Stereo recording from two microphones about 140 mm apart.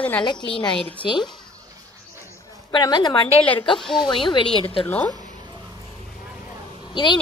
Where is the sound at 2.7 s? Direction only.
30° left (ahead or behind).